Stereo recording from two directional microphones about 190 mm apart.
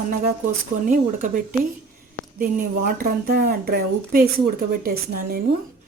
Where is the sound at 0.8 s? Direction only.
45° right (ahead or behind).